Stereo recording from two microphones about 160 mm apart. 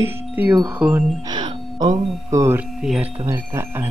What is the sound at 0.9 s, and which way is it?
Speech, 25° right (ahead or behind).